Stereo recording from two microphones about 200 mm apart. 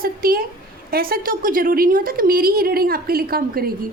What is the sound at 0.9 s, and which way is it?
A woman's voice, 50° right (ahead or behind).